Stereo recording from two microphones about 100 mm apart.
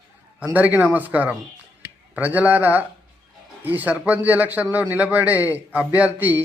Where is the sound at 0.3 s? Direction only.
15° right (ahead or behind).